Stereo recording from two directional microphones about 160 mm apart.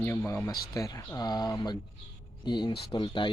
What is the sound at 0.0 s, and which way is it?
Speech, 15° left (ahead or behind).